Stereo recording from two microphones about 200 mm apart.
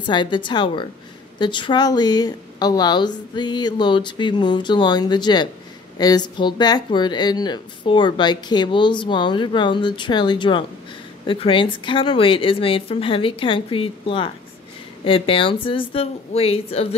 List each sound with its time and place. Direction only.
0.0 s speech: 25° left (ahead or behind)